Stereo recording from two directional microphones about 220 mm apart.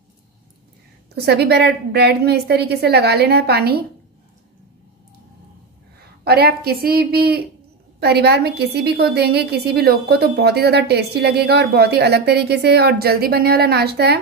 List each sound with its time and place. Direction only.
1.1 s a woman's voice: 45° right (ahead or behind)
6.2 s a woman's voice: 45° right (ahead or behind)